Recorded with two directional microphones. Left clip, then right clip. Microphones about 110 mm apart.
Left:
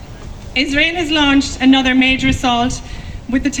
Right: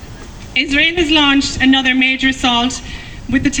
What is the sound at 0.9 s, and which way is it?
Speech, 50° left (ahead or behind).